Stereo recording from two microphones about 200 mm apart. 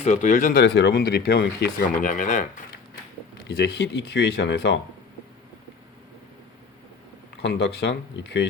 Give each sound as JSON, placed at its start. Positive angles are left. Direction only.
{"t": 0.0, "sound": "speech", "side_deg": 35}
{"t": 3.6, "sound": "speech", "side_deg": 60}
{"t": 7.4, "sound": "speech", "side_deg": 60}